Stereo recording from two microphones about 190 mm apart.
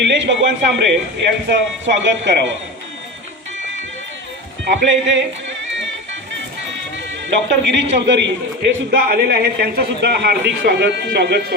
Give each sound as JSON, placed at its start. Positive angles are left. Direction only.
{"t": 0.1, "sound": "speech", "side_deg": -65}
{"t": 4.6, "sound": "speech", "side_deg": -75}
{"t": 7.4, "sound": "speech", "side_deg": -70}
{"t": 8.6, "sound": "a man's voice", "side_deg": -55}